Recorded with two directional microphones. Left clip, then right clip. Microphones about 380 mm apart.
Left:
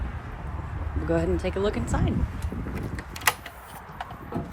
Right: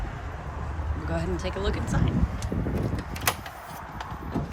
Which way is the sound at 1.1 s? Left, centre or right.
Centre.